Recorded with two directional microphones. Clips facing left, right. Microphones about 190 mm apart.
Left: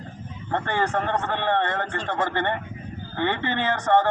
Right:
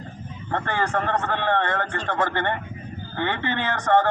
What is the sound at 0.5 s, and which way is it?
Speech, 20° left (ahead or behind).